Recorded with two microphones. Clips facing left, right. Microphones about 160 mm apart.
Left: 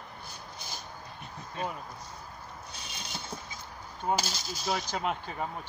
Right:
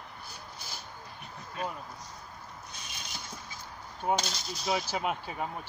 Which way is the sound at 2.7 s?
30° left (ahead or behind).